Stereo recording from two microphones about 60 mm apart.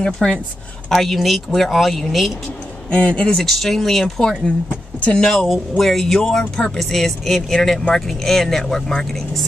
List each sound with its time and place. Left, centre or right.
0.0 s speech: centre
0.8 s speech: centre
2.9 s speech: centre
3.3 s speech: centre
5.1 s speech: centre